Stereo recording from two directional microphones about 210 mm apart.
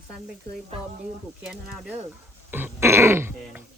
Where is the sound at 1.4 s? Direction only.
5° right (ahead or behind).